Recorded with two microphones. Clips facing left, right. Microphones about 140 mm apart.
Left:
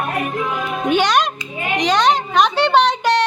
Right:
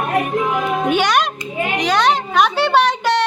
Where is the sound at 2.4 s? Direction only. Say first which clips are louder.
Even; 10° right (ahead or behind).